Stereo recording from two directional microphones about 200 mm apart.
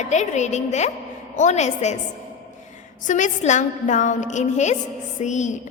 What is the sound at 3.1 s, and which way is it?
A woman's voice, 40° left (ahead or behind).